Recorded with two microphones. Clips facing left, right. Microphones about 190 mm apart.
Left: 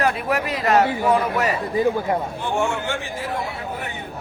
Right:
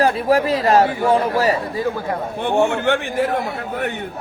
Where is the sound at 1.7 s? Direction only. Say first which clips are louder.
Left 2 dB; 20° left (ahead or behind).